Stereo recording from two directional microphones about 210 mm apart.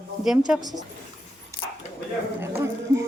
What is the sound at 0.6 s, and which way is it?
Speech, 20° right (ahead or behind).